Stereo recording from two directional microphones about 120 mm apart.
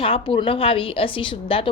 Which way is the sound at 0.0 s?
50° left (ahead or behind).